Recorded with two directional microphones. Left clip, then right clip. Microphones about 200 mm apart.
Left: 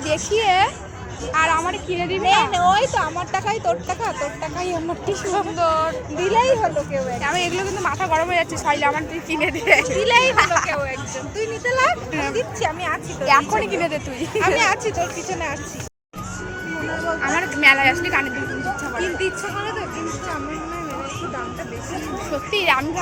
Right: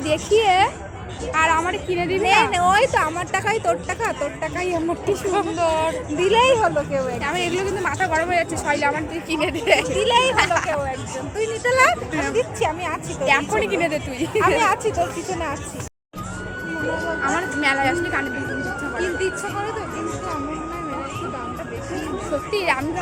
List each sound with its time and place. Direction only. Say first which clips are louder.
0.0 s a woman's voice: right 2 dB; 15° right (ahead or behind)
5.0 s speech: left 1 dB; 15° right (ahead or behind)
6.1 s speech: right 1 dB; 35° right (ahead or behind)
7.2 s speech: left 1 dB; 10° right (ahead or behind)
8.3 s speech: left 1 dB; centre (ahead or behind)
9.8 s speech: left 2 dB; 10° right (ahead or behind)
17.0 s music: left 4 dB; 5° right (ahead or behind)
18.9 s chatter: right 2 dB; 10° right (ahead or behind)
21.9 s speech: right 1 dB; centre (ahead or behind)